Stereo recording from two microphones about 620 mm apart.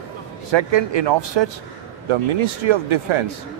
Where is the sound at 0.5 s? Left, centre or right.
Right.